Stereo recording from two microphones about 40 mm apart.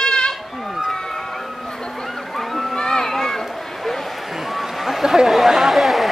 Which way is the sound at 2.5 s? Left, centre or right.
Centre.